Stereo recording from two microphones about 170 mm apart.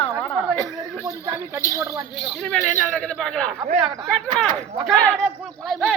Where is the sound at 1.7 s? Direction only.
20° right (ahead or behind).